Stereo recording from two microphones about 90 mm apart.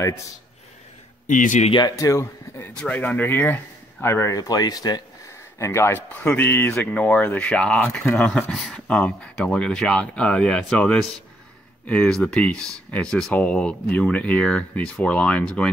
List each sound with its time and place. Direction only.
1.7 s speech: 55° left (ahead or behind)
2.0 s speech: 35° left (ahead or behind)
2.7 s speech: 15° left (ahead or behind)
4.4 s speech: 45° left (ahead or behind)
5.6 s speech: 30° left (ahead or behind)
6.2 s speech: 20° left (ahead or behind); by 8.7 s centre (ahead or behind)
8.7 s speech: 15° left (ahead or behind)